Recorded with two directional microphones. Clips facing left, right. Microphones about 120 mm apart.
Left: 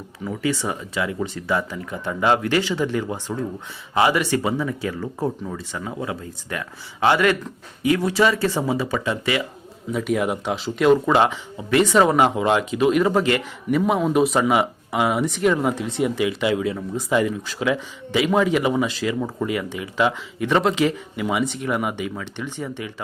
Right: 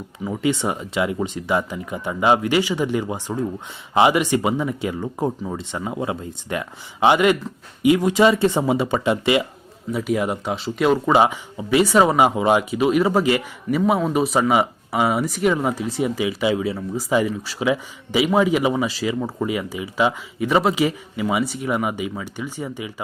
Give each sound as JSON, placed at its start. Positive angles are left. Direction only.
{"t": 0.3, "sound": "speech", "side_deg": -20}
{"t": 9.9, "sound": "speech", "side_deg": 0}